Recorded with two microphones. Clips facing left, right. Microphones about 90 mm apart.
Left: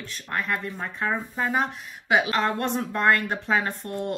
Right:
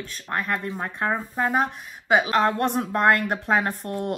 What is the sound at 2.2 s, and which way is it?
A woman's voice, 45° right (ahead or behind).